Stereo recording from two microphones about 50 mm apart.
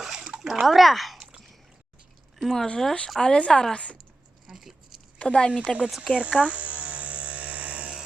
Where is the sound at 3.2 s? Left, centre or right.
Centre.